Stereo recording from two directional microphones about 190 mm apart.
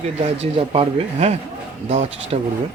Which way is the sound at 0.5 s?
30° right (ahead or behind).